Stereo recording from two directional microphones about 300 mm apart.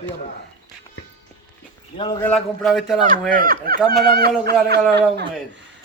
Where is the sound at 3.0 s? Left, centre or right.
Right.